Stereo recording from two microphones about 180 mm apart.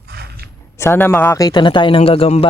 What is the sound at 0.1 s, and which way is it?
Zipper, 60° right (ahead or behind).